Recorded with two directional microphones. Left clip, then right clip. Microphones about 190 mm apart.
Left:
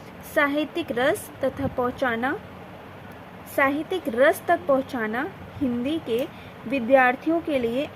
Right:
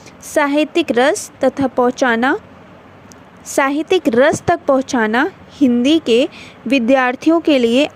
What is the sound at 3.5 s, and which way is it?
Speech, 40° right (ahead or behind).